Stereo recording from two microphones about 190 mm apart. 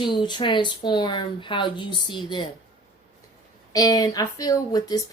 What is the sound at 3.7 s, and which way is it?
Speech, 20° left (ahead or behind).